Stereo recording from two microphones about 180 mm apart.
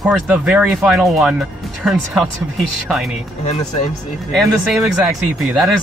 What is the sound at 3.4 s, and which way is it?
Speech, 35° left (ahead or behind).